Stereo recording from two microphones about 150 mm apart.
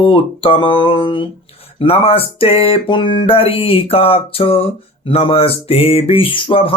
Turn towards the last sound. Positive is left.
turn(degrees=35)  # may be behind; listen again after turning